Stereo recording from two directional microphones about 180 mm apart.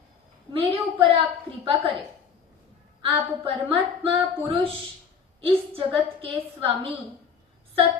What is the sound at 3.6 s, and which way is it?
Speech, 30° right (ahead or behind).